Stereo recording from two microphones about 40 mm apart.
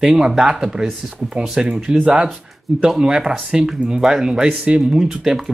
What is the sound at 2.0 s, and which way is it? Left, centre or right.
Speech, right.